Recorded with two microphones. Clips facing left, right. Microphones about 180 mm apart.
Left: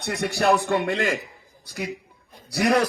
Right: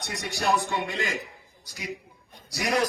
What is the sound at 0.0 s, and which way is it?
A man's voice, 60° left (ahead or behind).